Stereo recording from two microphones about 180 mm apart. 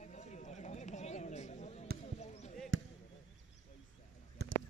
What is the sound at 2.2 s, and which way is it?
Basketball bounce, 40° left (ahead or behind).